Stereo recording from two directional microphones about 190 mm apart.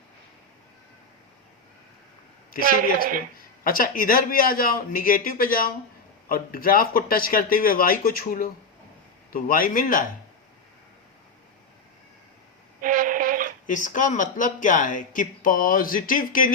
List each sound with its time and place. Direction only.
2.6 s speech: 50° right (ahead or behind)
3.6 s speech: 50° left (ahead or behind)
12.8 s a sound: 45° right (ahead or behind)
13.7 s speech: 45° left (ahead or behind)